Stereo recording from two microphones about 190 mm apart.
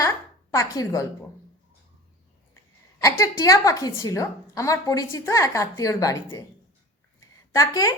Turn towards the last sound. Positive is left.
turn(degrees=15)  # may be behind; listen again after turning